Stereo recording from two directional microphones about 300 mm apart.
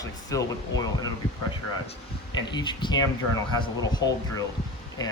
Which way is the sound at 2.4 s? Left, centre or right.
Centre.